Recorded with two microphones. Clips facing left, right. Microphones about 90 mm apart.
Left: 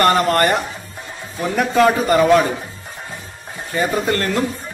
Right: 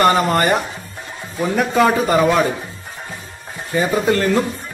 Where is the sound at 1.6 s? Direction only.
Centre (ahead or behind).